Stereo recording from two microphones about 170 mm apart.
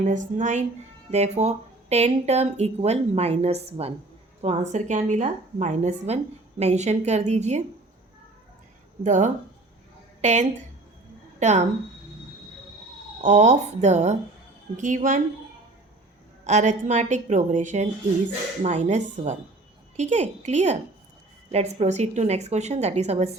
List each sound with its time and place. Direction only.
0.1 s a woman's voice: 45° right (ahead or behind)
9.0 s a woman's voice: 45° right (ahead or behind)
13.2 s a woman's voice: 45° right (ahead or behind)
16.4 s a woman's voice: 45° right (ahead or behind)